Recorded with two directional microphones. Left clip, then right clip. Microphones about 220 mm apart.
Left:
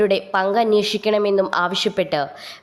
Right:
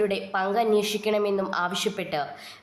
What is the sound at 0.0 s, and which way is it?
A woman's voice, 30° left (ahead or behind).